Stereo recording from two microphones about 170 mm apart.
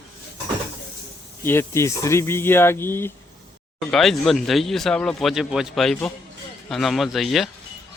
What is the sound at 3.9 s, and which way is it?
A man's voice, centre (ahead or behind).